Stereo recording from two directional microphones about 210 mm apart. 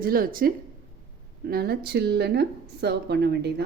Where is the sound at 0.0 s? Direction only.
45° right (ahead or behind).